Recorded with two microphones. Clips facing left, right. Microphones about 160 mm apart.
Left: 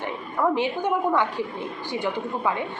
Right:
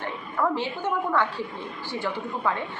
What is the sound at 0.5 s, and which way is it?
A woman's voice, 15° left (ahead or behind).